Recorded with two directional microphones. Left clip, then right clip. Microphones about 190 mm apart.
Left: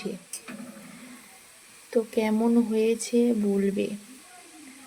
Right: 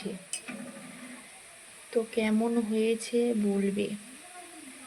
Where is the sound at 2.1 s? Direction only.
20° left (ahead or behind).